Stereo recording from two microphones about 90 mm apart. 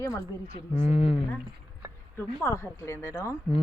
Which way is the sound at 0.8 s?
90° left.